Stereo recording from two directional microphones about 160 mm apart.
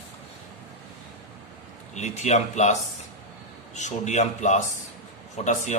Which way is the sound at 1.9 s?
45° left (ahead or behind).